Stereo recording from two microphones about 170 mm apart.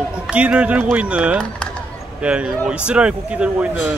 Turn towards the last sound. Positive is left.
turn(degrees=-5)  # may be behind; listen again after turning